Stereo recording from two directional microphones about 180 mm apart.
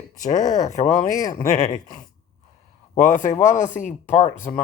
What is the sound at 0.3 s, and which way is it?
Speech, 20° left (ahead or behind).